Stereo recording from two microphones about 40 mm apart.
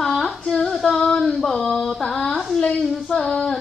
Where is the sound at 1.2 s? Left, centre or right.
Centre.